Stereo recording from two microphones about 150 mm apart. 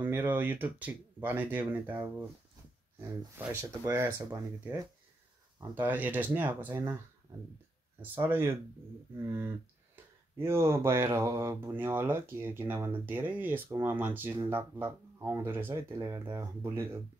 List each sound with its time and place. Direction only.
0.0 s speech: 10° right (ahead or behind)
3.4 s speech: 15° right (ahead or behind)
5.8 s speech: 10° right (ahead or behind)
6.7 s speech: 30° right (ahead or behind)
8.0 s speech: 15° right (ahead or behind)